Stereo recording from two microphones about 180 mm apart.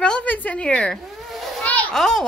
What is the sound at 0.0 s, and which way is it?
Children playing, 5° left (ahead or behind).